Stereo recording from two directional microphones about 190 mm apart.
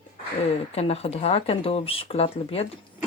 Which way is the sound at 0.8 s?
30° left (ahead or behind).